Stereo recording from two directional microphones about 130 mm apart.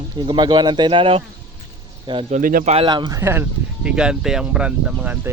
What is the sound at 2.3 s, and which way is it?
Speech, 90° right.